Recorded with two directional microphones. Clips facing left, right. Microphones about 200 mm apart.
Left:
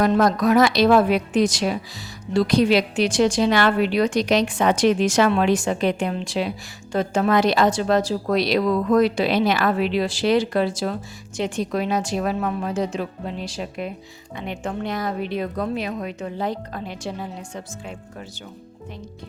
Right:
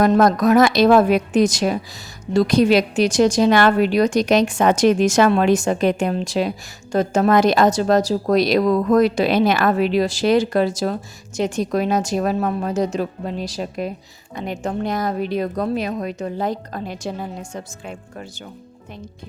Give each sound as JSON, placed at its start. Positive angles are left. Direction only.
{"t": 0.0, "sound": "a woman's voice", "side_deg": -45}